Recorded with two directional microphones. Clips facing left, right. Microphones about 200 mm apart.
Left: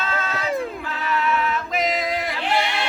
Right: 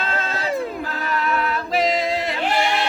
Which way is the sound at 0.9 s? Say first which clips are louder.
Even; 40° right (ahead or behind).